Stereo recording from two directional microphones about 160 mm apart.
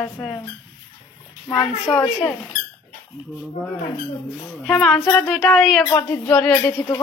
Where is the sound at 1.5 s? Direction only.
20° left (ahead or behind).